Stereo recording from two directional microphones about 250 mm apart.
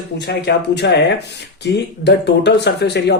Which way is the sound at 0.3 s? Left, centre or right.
Left.